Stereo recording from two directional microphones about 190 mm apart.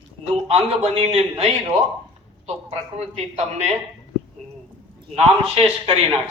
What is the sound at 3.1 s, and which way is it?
Speech, 35° right (ahead or behind).